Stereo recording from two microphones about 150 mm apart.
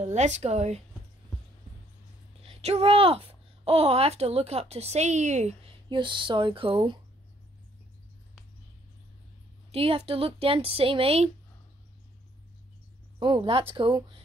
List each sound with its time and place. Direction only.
0.0 s speech: 50° right (ahead or behind)
2.4 s a child's voice: 40° right (ahead or behind)
5.9 s speech: 30° right (ahead or behind)
9.7 s speech: 40° right (ahead or behind)
13.2 s speech: 35° right (ahead or behind)